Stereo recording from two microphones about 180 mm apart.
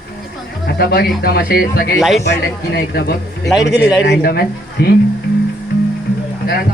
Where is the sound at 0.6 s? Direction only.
60° left (ahead or behind).